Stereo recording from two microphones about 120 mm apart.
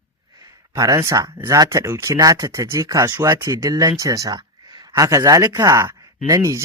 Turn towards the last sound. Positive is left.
turn(degrees=-30)  # may be behind; listen again after turning